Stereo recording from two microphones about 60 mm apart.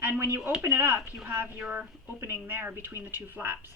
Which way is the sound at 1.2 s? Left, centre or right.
Right.